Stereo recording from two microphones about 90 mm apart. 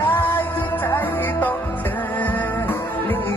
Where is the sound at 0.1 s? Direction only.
20° left (ahead or behind).